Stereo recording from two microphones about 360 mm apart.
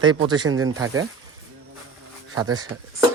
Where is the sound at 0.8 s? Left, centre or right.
Right.